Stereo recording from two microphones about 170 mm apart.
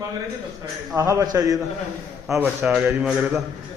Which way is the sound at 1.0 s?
20° right (ahead or behind).